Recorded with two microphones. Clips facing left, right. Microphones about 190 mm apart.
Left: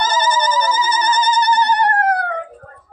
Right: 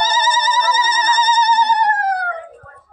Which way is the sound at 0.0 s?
55° left (ahead or behind).